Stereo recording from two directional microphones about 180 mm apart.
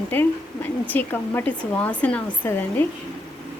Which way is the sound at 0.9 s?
10° left (ahead or behind).